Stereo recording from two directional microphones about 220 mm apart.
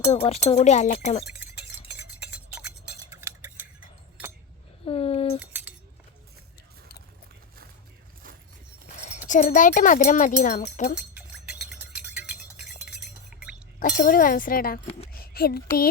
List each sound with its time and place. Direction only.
0.0 s speech: 30° left (ahead or behind)
2.2 s cutlery: 5° right (ahead or behind)
4.9 s a sound: 25° left (ahead or behind)
9.0 s speech: 35° left (ahead or behind)
11.7 s music: 5° right (ahead or behind)
12.8 s chink: 5° right (ahead or behind)
13.7 s speech: 45° left (ahead or behind)
15.1 s a sound: 45° left (ahead or behind)